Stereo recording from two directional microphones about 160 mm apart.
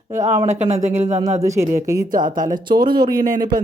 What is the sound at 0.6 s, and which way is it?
Speech, 45° right (ahead or behind).